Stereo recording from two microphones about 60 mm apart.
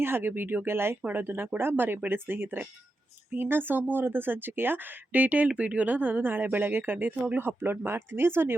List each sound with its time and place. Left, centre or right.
0.0 s speech: right